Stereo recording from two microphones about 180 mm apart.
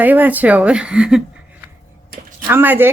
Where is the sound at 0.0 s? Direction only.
10° right (ahead or behind).